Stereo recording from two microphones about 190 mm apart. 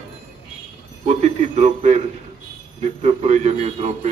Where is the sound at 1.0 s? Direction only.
35° right (ahead or behind).